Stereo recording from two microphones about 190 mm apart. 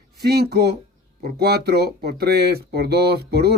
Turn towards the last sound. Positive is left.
turn(degrees=-60)  # may be behind; listen again after turning